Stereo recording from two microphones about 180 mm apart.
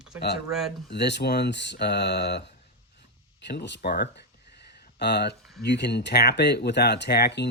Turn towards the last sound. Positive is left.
turn(degrees=70)  # may be behind; listen again after turning